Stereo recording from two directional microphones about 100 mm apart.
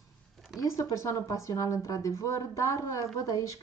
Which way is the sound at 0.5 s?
30° left (ahead or behind).